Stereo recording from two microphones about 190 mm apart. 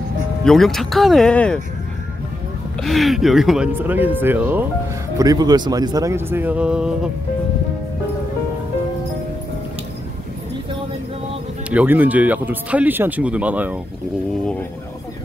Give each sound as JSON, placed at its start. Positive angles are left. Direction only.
{"t": 0.5, "sound": "speech", "side_deg": 0}
{"t": 2.8, "sound": "speech", "side_deg": 0}
{"t": 11.7, "sound": "speech", "side_deg": -10}